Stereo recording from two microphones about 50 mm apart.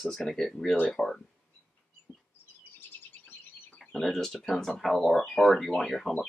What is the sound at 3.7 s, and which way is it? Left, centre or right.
Speech, centre.